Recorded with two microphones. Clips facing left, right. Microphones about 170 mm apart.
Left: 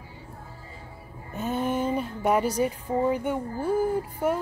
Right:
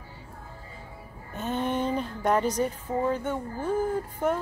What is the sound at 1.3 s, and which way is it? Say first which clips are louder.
A woman's voice: left 1 dB; 10° left (ahead or behind).